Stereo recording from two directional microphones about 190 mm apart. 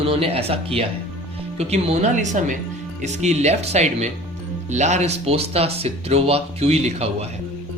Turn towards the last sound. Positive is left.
turn(degrees=-35)  # may be behind; listen again after turning